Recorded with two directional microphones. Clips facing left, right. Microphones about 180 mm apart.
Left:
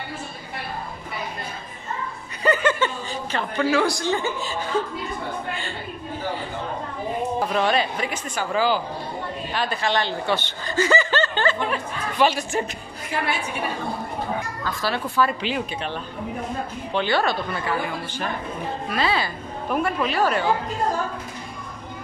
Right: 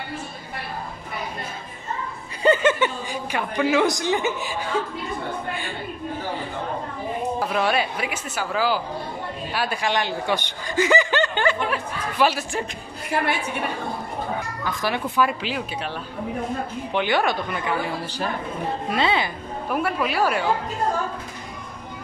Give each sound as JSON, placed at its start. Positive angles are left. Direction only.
{"t": 2.4, "sound": "speech", "side_deg": -25}
{"t": 7.3, "sound": "speech", "side_deg": -5}
{"t": 14.6, "sound": "speech", "side_deg": -15}
{"t": 15.4, "sound": "speech", "side_deg": -5}
{"t": 16.9, "sound": "speech", "side_deg": -15}
{"t": 17.8, "sound": "a woman's voice", "side_deg": -35}
{"t": 18.9, "sound": "speech", "side_deg": -20}
{"t": 19.7, "sound": "speech", "side_deg": -5}